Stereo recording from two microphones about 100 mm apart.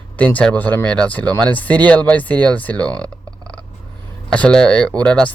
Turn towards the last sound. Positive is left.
turn(degrees=10)  # may be behind; listen again after turning